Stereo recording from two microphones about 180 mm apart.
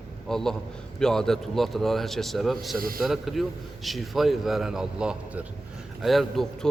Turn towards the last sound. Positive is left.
turn(degrees=0)  # may be behind; listen again after turning